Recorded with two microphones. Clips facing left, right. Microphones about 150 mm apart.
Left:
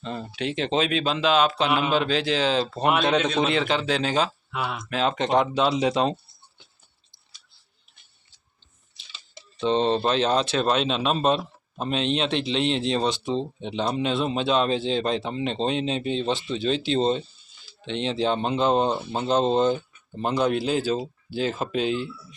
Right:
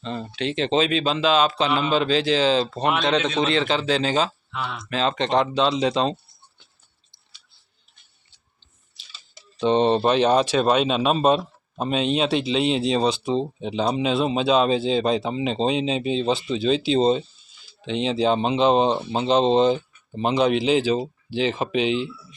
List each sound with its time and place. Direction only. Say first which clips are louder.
0.0 s speech: right 2 dB; 5° left (ahead or behind)
9.6 s speech: right 3 dB; 15° right (ahead or behind)
13.0 s speech: right 3 dB; 35° right (ahead or behind)
13.6 s speech: right 3 dB; 5° right (ahead or behind)
18.9 s speech: right 3 dB; 20° right (ahead or behind)
20.2 s speech: right 4 dB; 90° right
21.6 s speech: right 3 dB; 75° right (ahead or behind)